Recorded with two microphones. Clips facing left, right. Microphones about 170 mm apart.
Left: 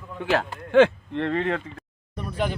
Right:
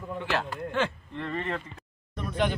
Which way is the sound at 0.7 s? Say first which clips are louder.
Left 14 dB; 75° left (ahead or behind).